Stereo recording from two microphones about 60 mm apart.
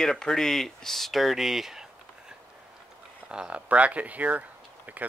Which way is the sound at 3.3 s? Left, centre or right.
Centre.